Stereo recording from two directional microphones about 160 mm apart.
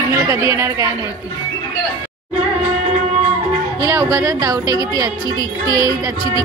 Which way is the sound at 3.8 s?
20° right (ahead or behind).